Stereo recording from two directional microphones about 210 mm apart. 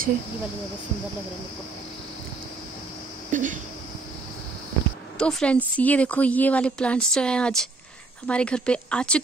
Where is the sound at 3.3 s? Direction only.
40° right (ahead or behind).